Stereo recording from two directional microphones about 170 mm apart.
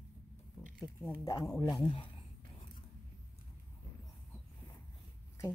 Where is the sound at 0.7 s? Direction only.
Centre (ahead or behind).